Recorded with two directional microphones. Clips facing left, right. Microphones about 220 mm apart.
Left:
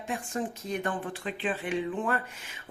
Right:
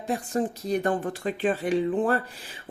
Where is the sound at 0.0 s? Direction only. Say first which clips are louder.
Right 6 dB; 35° right (ahead or behind).